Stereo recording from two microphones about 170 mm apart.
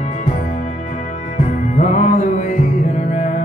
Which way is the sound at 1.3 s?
45° left (ahead or behind).